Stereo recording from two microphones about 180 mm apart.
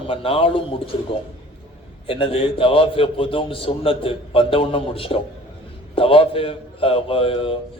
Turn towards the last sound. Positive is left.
turn(degrees=30)  # may be behind; listen again after turning